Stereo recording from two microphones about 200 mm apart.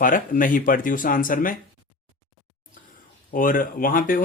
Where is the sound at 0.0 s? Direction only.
45° left (ahead or behind).